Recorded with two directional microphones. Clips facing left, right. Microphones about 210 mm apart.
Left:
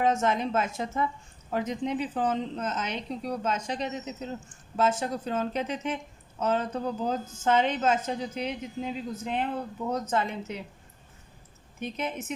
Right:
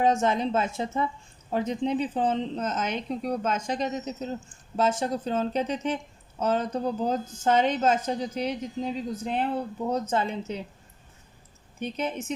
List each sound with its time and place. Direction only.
0.0 s a woman's voice: 30° right (ahead or behind)
4.8 s a woman's voice: 30° right (ahead or behind)
11.8 s a woman's voice: 35° right (ahead or behind)